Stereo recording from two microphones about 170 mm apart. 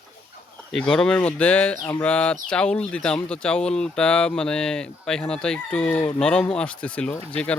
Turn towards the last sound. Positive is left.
turn(degrees=5)  # may be behind; listen again after turning